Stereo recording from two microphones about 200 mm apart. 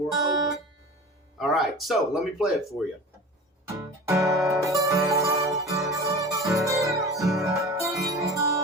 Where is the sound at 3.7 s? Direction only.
15° right (ahead or behind).